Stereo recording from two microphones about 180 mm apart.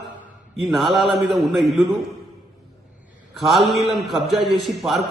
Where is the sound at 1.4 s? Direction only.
Centre (ahead or behind).